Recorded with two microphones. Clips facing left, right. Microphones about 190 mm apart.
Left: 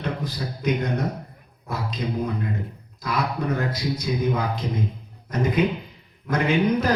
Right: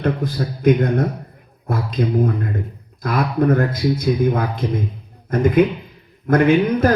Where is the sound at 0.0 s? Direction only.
55° right (ahead or behind).